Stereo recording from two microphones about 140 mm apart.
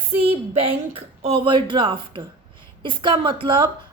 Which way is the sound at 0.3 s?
40° right (ahead or behind).